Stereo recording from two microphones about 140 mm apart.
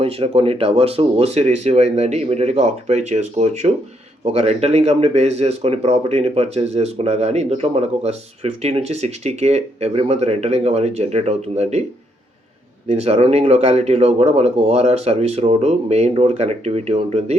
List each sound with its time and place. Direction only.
0.0 s speech: 40° right (ahead or behind)
12.9 s speech: 50° right (ahead or behind)